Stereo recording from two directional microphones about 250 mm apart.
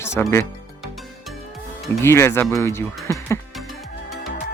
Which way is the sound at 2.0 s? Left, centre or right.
Centre.